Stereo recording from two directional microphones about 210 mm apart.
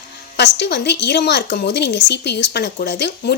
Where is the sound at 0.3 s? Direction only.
55° left (ahead or behind).